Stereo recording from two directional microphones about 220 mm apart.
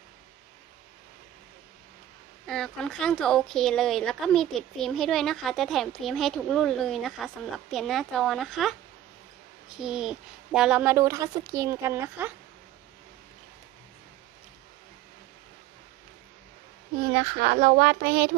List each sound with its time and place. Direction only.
2.5 s a woman's voice: centre (ahead or behind)
17.2 s speech: 40° right (ahead or behind)